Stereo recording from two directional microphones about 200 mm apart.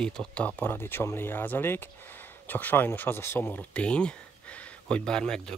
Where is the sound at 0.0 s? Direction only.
5° left (ahead or behind).